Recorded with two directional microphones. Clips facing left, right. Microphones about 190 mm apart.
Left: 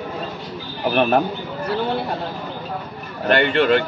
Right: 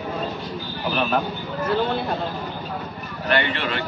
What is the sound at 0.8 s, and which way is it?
Speech, 55° left (ahead or behind).